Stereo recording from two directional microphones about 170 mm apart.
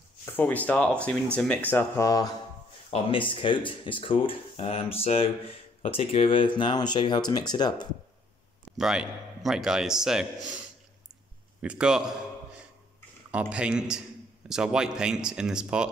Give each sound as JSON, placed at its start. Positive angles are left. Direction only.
{"t": 0.2, "sound": "speech", "side_deg": 10}
{"t": 2.9, "sound": "speech", "side_deg": 30}
{"t": 8.7, "sound": "a man's voice", "side_deg": -5}
{"t": 11.6, "sound": "a man's voice", "side_deg": -5}
{"t": 13.3, "sound": "a man's voice", "side_deg": -5}